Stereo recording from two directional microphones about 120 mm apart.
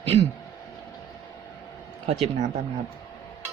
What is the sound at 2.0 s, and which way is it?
Speech, 70° right (ahead or behind).